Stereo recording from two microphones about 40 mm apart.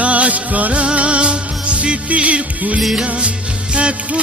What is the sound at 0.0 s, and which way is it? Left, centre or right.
Music, right.